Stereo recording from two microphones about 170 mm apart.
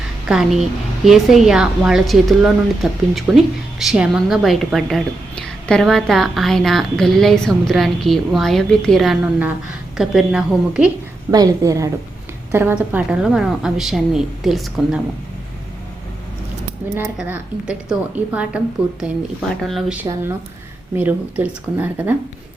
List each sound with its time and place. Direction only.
0.3 s a woman's voice: centre (ahead or behind)
11.3 s a woman's voice: 20° right (ahead or behind); by 15.0 s centre (ahead or behind)
16.8 s a woman's voice: 10° right (ahead or behind)
20.0 s a woman's voice: 15° right (ahead or behind)